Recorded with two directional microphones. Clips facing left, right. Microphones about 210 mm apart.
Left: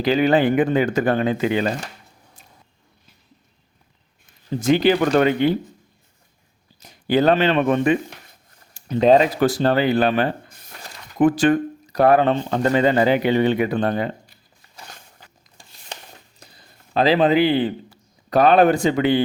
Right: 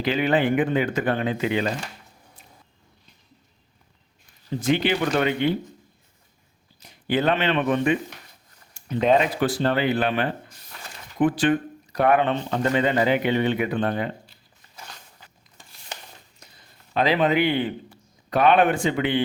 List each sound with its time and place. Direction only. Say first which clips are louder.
0.0 s speech: left 5 dB; 40° left (ahead or behind)
4.4 s speech: left 5 dB; 40° left (ahead or behind)
6.7 s speech: left 5 dB; 40° left (ahead or behind)
16.4 s a sound: left 3 dB; 35° left (ahead or behind)
16.9 s speech: left 4 dB; 35° left (ahead or behind)